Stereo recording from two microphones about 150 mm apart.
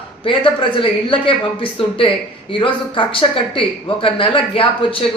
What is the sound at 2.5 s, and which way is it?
Speech, 35° left (ahead or behind).